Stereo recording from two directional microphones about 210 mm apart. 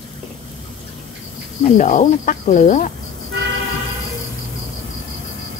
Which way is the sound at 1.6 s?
35° left (ahead or behind).